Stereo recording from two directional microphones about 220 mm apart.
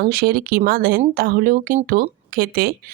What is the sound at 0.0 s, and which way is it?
Speech, 40° right (ahead or behind).